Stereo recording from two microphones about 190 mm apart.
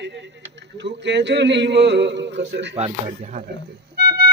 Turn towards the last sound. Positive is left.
turn(degrees=-60)  # may be behind; listen again after turning